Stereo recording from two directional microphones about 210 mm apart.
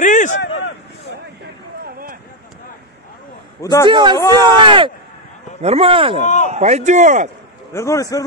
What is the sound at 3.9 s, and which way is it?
Speech, 20° right (ahead or behind).